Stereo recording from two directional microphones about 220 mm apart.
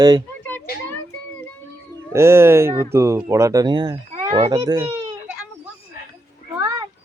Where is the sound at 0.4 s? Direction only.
10° left (ahead or behind).